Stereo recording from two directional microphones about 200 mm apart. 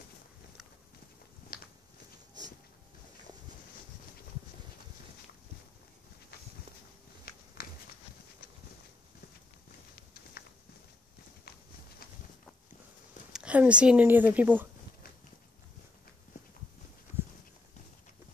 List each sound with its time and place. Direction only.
1.5 s a sound: 45° left (ahead or behind)
7.3 s walk: 50° left (ahead or behind)
13.3 s speech: 5° right (ahead or behind)